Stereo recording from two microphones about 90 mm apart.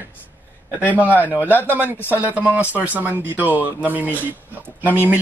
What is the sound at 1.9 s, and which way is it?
Speech, 25° left (ahead or behind).